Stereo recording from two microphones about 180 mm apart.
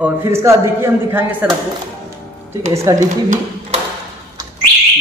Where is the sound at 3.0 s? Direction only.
40° right (ahead or behind).